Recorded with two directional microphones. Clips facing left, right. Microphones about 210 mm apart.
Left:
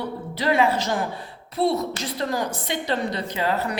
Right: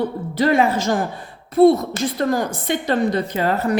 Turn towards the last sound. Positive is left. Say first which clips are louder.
# right 5 dB
turn(degrees=-50)  # may be behind; listen again after turning